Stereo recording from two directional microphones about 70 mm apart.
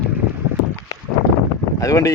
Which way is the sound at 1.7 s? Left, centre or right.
Left.